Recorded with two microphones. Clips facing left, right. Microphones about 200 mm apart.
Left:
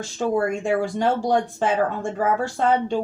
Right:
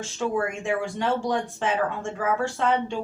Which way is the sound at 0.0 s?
35° left (ahead or behind).